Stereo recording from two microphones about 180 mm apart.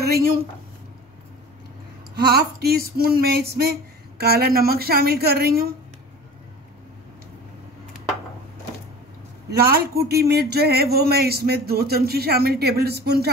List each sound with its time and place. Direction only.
0.0 s speech: 60° right (ahead or behind)
2.1 s speech: 60° right (ahead or behind)
9.5 s speech: 60° right (ahead or behind)